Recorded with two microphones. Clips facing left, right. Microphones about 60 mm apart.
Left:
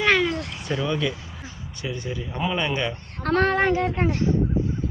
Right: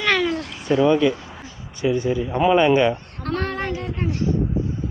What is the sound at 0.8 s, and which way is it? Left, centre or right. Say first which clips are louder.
Speech: right 10 dB; right.